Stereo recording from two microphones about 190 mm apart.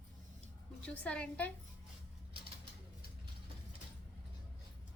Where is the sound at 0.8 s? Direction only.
5° left (ahead or behind).